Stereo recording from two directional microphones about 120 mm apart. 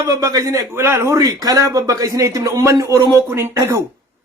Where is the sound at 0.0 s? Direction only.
25° right (ahead or behind).